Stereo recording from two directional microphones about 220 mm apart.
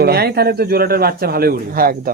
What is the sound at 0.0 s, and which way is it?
Speech, 45° right (ahead or behind).